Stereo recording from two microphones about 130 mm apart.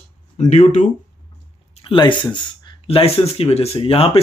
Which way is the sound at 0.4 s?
65° left (ahead or behind).